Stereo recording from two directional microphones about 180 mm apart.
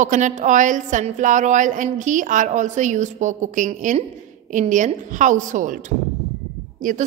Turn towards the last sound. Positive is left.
turn(degrees=-50)  # may be behind; listen again after turning